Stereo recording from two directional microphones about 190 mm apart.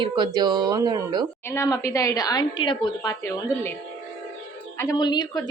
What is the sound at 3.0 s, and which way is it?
Speech, 15° left (ahead or behind).